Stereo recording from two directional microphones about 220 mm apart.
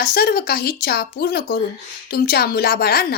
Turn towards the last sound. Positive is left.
turn(degrees=45)  # may be behind; listen again after turning